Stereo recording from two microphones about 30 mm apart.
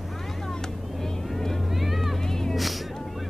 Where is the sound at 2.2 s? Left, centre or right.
Centre.